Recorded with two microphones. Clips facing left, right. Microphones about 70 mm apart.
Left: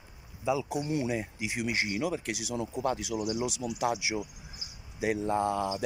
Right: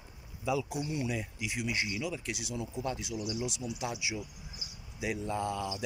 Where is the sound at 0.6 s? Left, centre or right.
Left.